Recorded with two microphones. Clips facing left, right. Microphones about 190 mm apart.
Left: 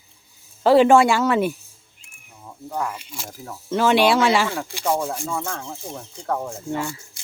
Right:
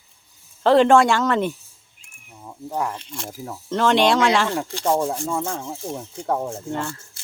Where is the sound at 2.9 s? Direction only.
5° left (ahead or behind).